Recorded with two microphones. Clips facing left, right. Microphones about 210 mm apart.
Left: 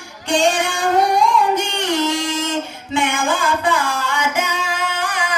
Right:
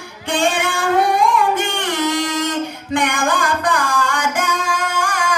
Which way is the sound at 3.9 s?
50° right (ahead or behind).